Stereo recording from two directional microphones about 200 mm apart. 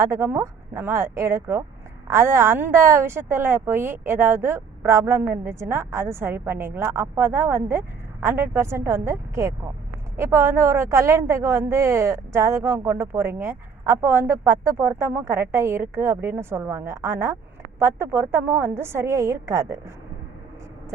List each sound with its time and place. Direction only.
0.0 s a woman's voice: 15° right (ahead or behind)